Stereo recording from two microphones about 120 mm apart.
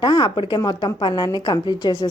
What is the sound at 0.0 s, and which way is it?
A woman's voice, 40° left (ahead or behind).